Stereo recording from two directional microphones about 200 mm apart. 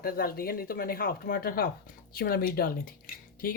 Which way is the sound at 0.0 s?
45° left (ahead or behind).